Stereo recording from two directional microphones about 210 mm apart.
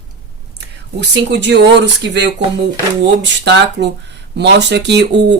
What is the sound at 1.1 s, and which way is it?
Speech, 55° right (ahead or behind).